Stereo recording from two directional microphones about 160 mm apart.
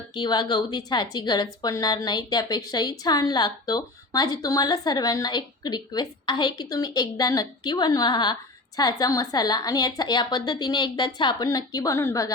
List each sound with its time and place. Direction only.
0.1 s a woman's voice: 30° left (ahead or behind)